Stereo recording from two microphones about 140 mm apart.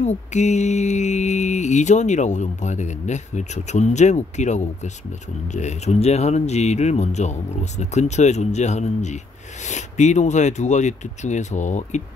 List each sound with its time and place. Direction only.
0.0 s mantra: 55° left (ahead or behind)
5.5 s speech: 55° left (ahead or behind)
7.8 s mantra: 55° left (ahead or behind)